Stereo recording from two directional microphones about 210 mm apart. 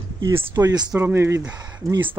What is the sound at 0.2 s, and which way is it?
Speech, 15° right (ahead or behind).